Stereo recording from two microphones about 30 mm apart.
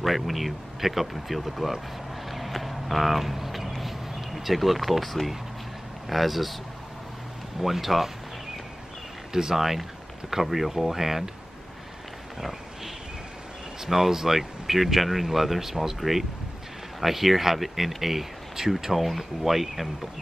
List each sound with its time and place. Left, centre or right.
0.0 s speech: centre
2.2 s a sound: centre
6.0 s speech: centre
7.6 s speech: centre
9.3 s speech: centre
9.6 s speech: centre
12.4 s a sound: centre
13.8 s speech: centre